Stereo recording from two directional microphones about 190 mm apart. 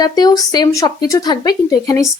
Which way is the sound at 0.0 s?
20° left (ahead or behind).